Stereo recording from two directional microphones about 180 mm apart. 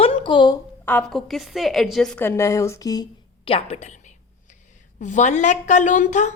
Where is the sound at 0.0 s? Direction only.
30° left (ahead or behind).